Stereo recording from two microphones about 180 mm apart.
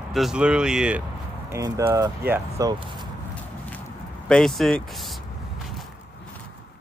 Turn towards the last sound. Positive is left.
turn(degrees=0)  # may be behind; listen again after turning